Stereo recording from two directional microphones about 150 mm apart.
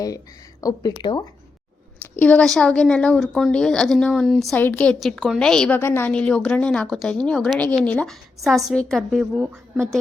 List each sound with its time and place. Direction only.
0.6 s speech: 25° left (ahead or behind)
2.0 s a woman's voice: 10° left (ahead or behind)